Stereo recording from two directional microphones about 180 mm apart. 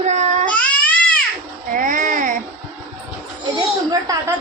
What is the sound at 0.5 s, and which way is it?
Cat, 5° left (ahead or behind).